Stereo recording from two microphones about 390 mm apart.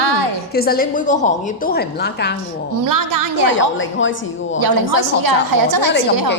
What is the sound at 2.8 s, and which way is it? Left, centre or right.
Speech, right.